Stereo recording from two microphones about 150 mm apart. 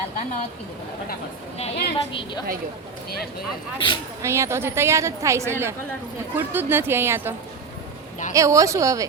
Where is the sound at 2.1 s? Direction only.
30° left (ahead or behind).